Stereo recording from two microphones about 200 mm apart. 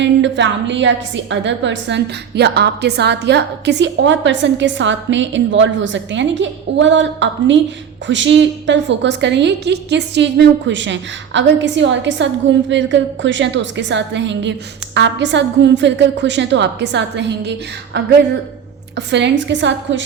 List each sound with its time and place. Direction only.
0.0 s a woman's voice: 65° right (ahead or behind)
18.9 s a woman's voice: 60° right (ahead or behind)